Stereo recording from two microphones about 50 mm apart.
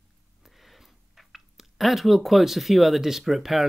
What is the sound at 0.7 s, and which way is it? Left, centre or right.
Speech, centre.